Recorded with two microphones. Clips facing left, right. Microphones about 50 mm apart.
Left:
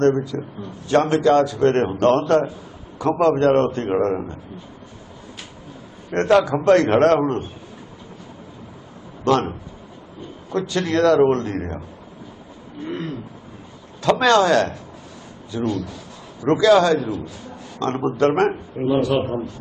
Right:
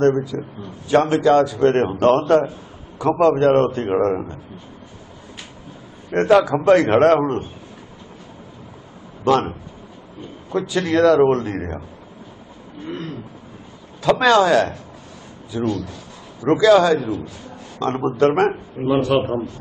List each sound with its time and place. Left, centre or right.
0.0 s a man's voice: centre
6.1 s a man's voice: centre
9.2 s a man's voice: centre
10.7 s a man's voice: centre
14.0 s a man's voice: centre
18.9 s a man's voice: right
19.1 s a man's voice: centre